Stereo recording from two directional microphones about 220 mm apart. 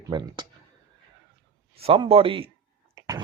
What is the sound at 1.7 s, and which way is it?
Speech, 25° right (ahead or behind).